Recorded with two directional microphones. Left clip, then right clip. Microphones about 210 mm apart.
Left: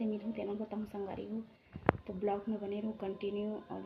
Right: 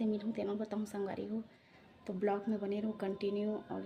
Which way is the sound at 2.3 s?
15° right (ahead or behind).